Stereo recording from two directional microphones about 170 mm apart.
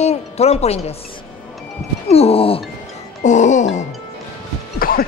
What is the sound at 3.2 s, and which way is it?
Speech, 45° left (ahead or behind).